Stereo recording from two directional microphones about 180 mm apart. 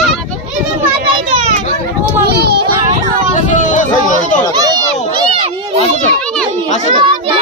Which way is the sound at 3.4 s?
45° left (ahead or behind).